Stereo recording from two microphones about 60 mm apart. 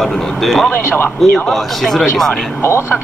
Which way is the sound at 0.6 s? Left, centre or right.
Left.